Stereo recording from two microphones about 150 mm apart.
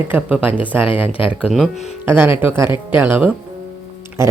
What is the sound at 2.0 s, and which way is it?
Speech, 15° right (ahead or behind).